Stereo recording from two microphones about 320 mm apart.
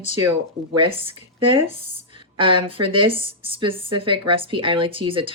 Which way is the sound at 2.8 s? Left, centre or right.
Centre.